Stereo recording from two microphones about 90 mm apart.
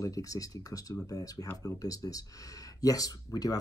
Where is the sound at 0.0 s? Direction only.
40° left (ahead or behind).